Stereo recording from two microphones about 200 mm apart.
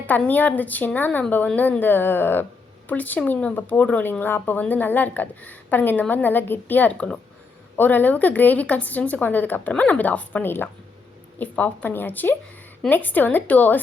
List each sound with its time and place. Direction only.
0.1 s speech: 10° left (ahead or behind)